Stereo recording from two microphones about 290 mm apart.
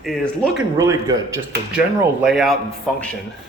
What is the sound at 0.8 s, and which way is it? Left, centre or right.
Speech, centre.